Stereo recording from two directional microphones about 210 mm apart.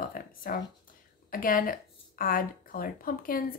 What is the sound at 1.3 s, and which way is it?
Speech, 40° left (ahead or behind).